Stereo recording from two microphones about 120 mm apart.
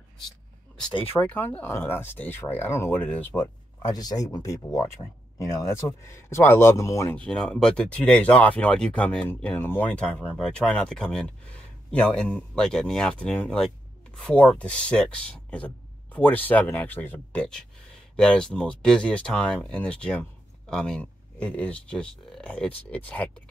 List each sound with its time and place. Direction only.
1.2 s speech: 10° left (ahead or behind)
3.9 s speech: 30° left (ahead or behind)
7.2 s speech: 5° left (ahead or behind)